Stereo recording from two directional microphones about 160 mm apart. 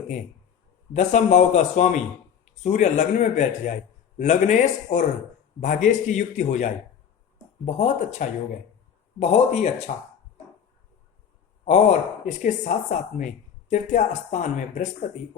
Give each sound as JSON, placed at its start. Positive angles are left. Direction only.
{"t": 0.9, "sound": "speech", "side_deg": 50}
{"t": 11.6, "sound": "speech", "side_deg": 45}